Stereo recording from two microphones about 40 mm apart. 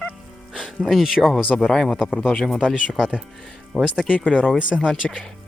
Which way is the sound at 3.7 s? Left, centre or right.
Centre.